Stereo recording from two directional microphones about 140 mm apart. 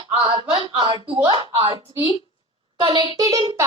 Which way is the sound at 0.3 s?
35° right (ahead or behind).